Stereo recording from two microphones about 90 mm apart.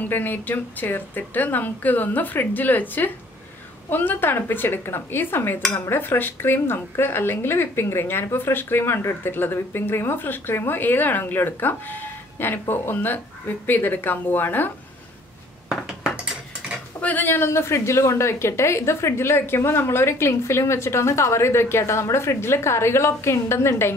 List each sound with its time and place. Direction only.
0.0 s dishes: 20° left (ahead or behind)
15.7 s dishes: 5° right (ahead or behind)
17.0 s a woman's voice: 20° left (ahead or behind)